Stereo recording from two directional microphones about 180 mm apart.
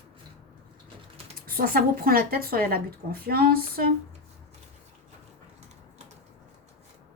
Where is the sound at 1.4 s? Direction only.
55° right (ahead or behind).